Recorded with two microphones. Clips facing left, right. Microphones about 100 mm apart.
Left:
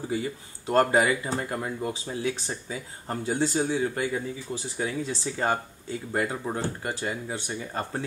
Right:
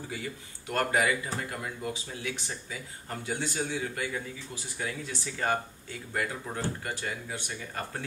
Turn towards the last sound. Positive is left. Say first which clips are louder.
# left 5 dB
turn(degrees=30)  # may be behind; listen again after turning